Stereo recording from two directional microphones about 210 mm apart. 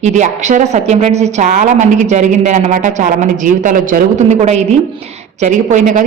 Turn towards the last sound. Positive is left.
turn(degrees=-35)  # may be behind; listen again after turning